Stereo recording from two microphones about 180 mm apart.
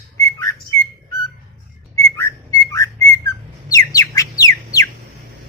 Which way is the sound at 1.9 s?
15° left (ahead or behind).